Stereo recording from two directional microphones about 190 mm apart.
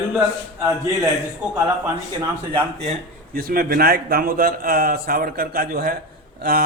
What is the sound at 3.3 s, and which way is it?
A man's voice, 50° right (ahead or behind).